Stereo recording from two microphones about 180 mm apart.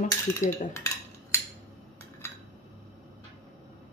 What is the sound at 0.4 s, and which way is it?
Speech, 45° left (ahead or behind).